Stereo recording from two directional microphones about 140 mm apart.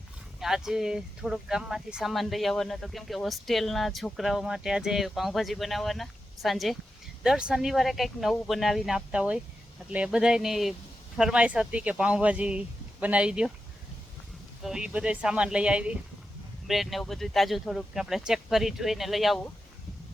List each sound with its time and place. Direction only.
0.3 s speech: centre (ahead or behind)
14.6 s speech: 5° right (ahead or behind)